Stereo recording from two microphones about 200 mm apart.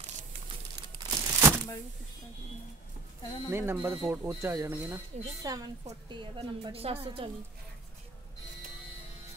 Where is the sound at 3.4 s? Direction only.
10° right (ahead or behind); by 7.3 s 30° right (ahead or behind).